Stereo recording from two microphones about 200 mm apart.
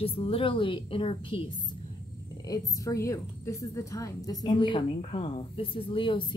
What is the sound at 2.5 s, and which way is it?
A woman's voice, 15° left (ahead or behind).